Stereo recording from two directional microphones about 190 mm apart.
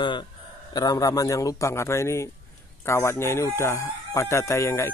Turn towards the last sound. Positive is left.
turn(degrees=15)  # may be behind; listen again after turning